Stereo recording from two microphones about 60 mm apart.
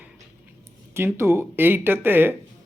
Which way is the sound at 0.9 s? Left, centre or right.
Right.